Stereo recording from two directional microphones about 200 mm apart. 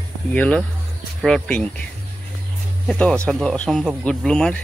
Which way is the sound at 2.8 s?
5° left (ahead or behind).